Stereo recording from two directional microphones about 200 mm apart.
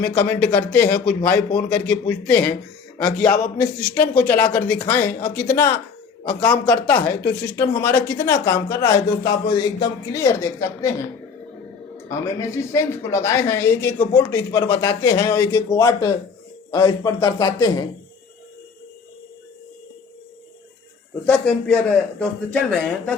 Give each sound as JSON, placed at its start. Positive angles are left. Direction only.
{"t": 0.0, "sound": "speech", "side_deg": 10}
{"t": 12.0, "sound": "speech", "side_deg": 15}
{"t": 21.2, "sound": "speech", "side_deg": 10}